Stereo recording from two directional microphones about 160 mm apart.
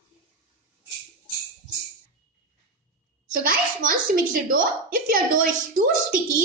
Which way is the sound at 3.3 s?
60° right (ahead or behind).